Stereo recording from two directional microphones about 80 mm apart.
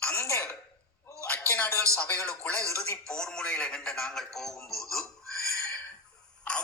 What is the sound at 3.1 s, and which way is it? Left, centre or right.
A man's voice, centre.